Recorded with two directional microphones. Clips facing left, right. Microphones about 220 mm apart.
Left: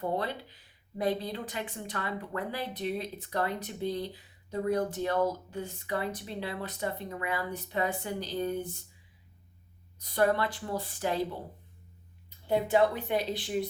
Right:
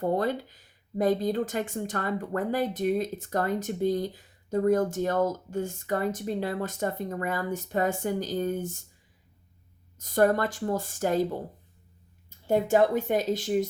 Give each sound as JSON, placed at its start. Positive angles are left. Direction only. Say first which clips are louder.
{"t": 0.0, "sound": "speech", "louder": "right 6 dB", "side_deg": -45}
{"t": 10.0, "sound": "speech", "louder": "right 4 dB", "side_deg": -45}
{"t": 12.5, "sound": "speech", "louder": "right 3 dB", "side_deg": -45}